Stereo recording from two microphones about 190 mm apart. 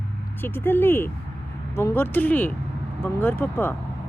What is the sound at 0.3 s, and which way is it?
Speech, 10° left (ahead or behind).